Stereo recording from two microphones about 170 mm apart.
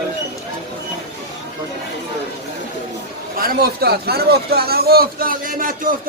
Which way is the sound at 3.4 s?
65° right (ahead or behind).